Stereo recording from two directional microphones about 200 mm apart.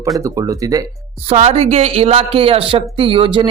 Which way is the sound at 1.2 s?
30° right (ahead or behind).